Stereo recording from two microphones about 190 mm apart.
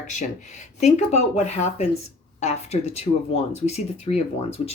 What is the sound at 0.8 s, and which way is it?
Speech, 35° left (ahead or behind).